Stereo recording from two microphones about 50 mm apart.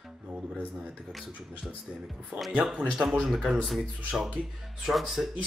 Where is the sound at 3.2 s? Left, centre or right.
Centre.